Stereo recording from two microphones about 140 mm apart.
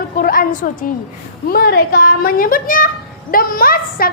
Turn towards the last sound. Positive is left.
turn(degrees=90)